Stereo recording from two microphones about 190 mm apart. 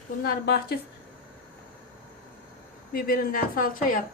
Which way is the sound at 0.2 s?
55° left (ahead or behind).